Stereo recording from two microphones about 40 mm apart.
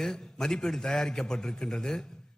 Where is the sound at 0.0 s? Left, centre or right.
Centre.